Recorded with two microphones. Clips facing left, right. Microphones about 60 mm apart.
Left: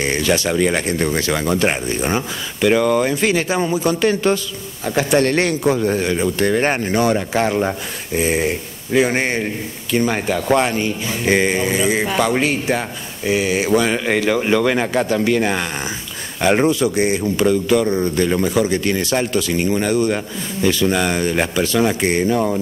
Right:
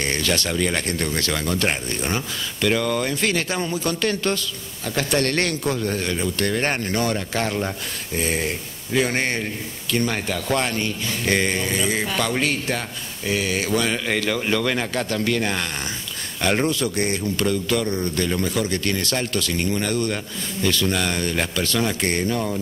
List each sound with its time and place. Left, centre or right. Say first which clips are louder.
0.0 s a man's voice: left 5 dB; centre